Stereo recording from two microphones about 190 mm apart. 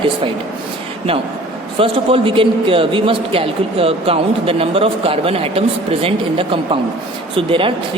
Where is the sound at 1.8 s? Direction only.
30° right (ahead or behind).